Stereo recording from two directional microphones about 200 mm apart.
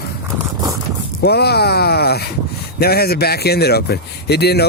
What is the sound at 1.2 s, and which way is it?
Speech, 55° left (ahead or behind).